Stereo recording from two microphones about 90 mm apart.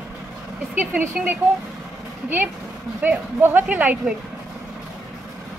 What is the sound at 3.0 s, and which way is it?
A woman's voice, 20° right (ahead or behind).